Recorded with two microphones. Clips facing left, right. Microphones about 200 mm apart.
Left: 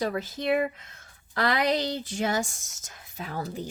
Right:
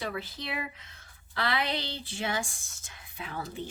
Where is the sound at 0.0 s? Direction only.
40° left (ahead or behind).